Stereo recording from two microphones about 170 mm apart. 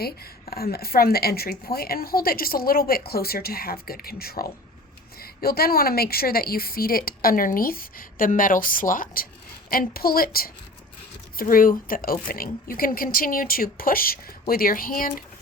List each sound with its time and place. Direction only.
0.5 s speech: 65° left (ahead or behind)